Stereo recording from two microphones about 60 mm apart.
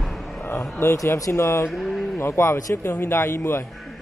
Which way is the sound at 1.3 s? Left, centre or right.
Left.